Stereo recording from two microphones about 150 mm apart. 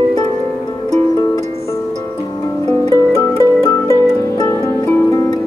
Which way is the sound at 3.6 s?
15° left (ahead or behind).